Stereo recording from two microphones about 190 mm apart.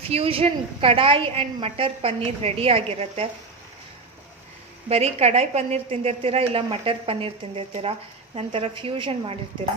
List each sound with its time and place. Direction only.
0.1 s a woman's voice: 30° right (ahead or behind)
4.9 s a woman's voice: 35° right (ahead or behind)